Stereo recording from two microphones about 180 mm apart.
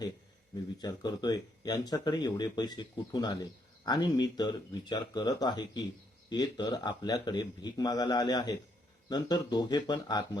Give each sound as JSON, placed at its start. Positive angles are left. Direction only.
{"t": 0.8, "sound": "speech", "side_deg": 25}